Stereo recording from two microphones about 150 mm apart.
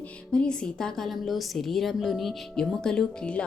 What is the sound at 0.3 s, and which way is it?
A woman's voice, 5° left (ahead or behind).